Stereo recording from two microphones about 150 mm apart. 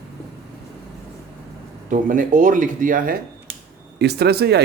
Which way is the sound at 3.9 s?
90° right.